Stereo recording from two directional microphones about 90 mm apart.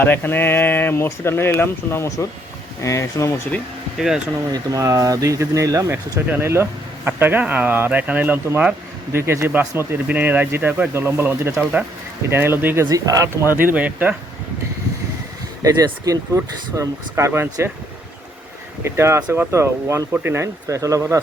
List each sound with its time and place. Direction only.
0.0 s speech: 20° left (ahead or behind)
3.9 s speech: 5° right (ahead or behind)
4.5 s speech: 40° right (ahead or behind)
11.6 s speech: 10° right (ahead or behind)
12.3 s speech: 25° right (ahead or behind)
12.9 s speech: 40° right (ahead or behind)
13.5 s speech: 20° right (ahead or behind)
15.6 s speech: 40° right (ahead or behind)
18.9 s speech: 30° right (ahead or behind)